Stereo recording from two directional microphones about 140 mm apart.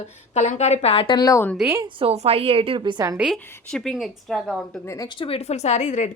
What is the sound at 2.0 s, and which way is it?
A woman's voice, 45° right (ahead or behind).